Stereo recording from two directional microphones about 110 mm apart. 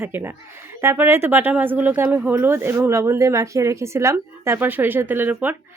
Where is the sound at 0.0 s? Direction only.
20° right (ahead or behind).